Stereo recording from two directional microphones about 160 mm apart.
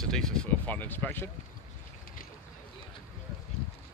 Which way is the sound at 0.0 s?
5° left (ahead or behind).